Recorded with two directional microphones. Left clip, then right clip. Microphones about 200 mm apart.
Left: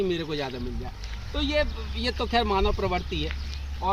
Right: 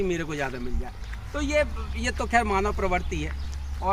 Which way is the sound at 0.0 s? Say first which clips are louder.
Even; centre (ahead or behind).